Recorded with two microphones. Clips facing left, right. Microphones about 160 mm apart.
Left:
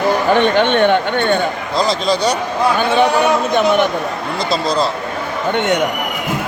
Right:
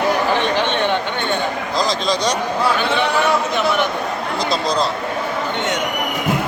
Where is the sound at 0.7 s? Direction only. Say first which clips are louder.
Left 6 dB; 55° left (ahead or behind).